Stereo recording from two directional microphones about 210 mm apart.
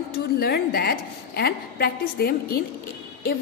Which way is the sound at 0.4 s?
45° left (ahead or behind).